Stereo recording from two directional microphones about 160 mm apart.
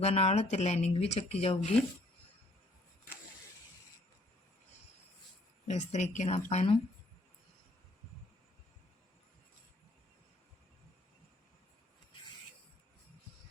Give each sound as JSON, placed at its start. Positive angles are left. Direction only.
{"t": 0.0, "sound": "speech", "side_deg": 40}
{"t": 5.6, "sound": "speech", "side_deg": 45}